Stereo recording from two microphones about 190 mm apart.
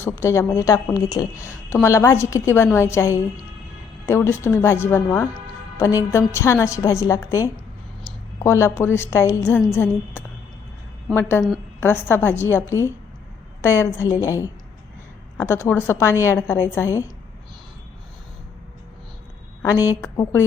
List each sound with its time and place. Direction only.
0.0 s a woman's voice: 15° left (ahead or behind)
19.6 s a woman's voice: 15° left (ahead or behind)